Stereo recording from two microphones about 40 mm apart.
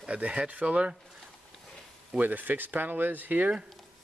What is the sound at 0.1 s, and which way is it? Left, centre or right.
Speech, right.